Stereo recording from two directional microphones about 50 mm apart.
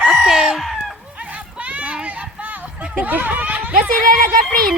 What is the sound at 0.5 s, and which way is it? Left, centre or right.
Speech, centre.